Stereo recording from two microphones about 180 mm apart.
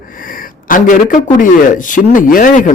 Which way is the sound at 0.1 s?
50° left (ahead or behind).